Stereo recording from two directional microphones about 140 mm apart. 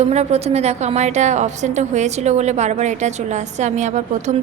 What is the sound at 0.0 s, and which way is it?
A woman's voice, 50° right (ahead or behind).